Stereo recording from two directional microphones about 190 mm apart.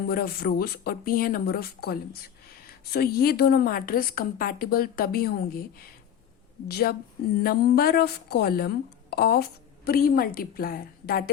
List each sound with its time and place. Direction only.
0.1 s speech: 50° left (ahead or behind)
6.7 s a woman's voice: 55° left (ahead or behind)